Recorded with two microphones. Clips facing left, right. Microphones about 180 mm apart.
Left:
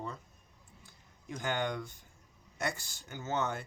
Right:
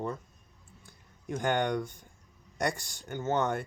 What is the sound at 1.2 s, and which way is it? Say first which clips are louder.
Speech: right 6 dB; 50° right (ahead or behind).